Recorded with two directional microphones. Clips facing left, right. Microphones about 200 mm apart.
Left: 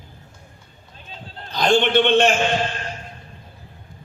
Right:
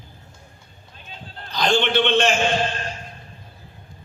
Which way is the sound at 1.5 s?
55° left (ahead or behind).